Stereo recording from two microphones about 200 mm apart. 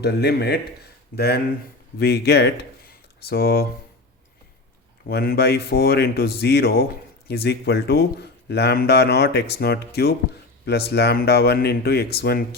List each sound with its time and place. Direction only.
0.0 s speech: 55° left (ahead or behind)
5.0 s speech: 50° left (ahead or behind)